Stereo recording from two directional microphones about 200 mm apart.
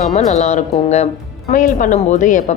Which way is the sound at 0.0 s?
35° left (ahead or behind).